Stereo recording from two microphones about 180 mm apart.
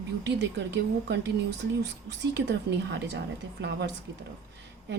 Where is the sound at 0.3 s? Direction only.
75° right (ahead or behind).